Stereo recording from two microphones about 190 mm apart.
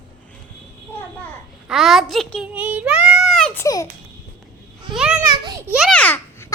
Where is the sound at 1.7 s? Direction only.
Centre (ahead or behind); by 3.8 s 15° left (ahead or behind).